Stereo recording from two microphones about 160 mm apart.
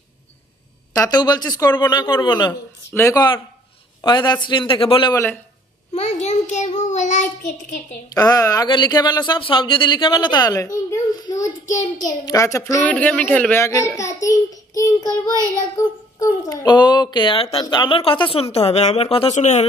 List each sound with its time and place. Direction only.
0.9 s speech: 25° left (ahead or behind)
2.9 s a man's voice: 15° left (ahead or behind)
4.0 s speech: 30° left (ahead or behind)
5.1 s a man's voice: 15° left (ahead or behind)
5.9 s a child's voice: 45° left (ahead or behind)
8.1 s speech: 20° left (ahead or behind); by 19.6 s 45° left (ahead or behind)